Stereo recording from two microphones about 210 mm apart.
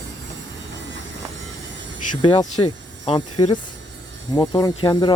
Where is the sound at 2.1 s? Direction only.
20° left (ahead or behind).